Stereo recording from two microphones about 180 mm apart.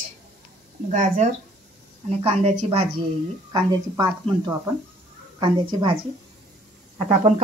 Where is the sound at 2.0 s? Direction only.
35° right (ahead or behind).